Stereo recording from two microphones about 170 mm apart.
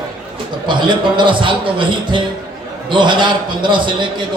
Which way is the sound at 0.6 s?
25° right (ahead or behind).